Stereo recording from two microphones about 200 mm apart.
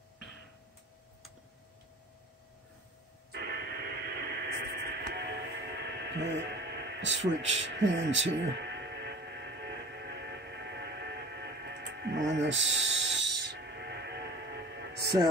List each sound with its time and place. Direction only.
3.3 s radio: 55° right (ahead or behind)